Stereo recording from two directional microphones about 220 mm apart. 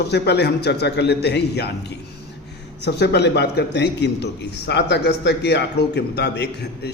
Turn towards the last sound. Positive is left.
turn(degrees=50)  # may be behind; listen again after turning